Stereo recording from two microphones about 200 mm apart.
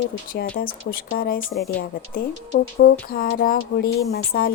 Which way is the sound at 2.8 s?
50° left (ahead or behind).